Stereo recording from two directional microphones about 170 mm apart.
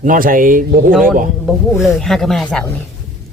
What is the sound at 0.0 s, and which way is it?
Speech, 55° right (ahead or behind).